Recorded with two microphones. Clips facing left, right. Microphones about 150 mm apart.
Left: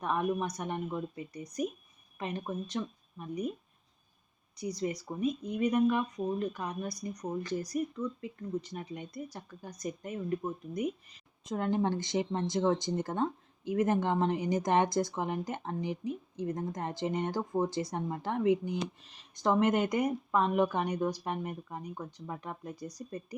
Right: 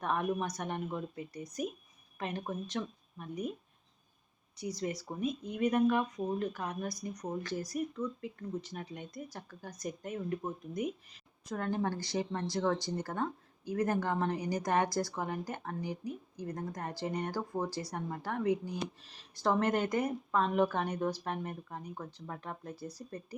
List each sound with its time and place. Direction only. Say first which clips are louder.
0.0 s speech: left 2 dB; centre (ahead or behind)
2.8 s speech: left 2 dB; 5° left (ahead or behind)
4.6 s speech: left 2 dB; 5° right (ahead or behind)
6.7 s speech: left 1 dB; 10° left (ahead or behind)
7.7 s speech: left 2 dB; centre (ahead or behind)
11.4 s speech: left 4 dB; 20° left (ahead or behind)